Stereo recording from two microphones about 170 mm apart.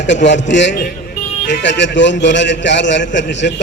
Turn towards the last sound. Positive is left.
turn(degrees=90)